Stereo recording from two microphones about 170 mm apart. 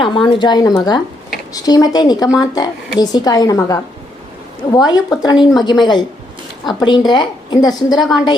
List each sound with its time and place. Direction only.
0.0 s a woman's voice: 30° left (ahead or behind)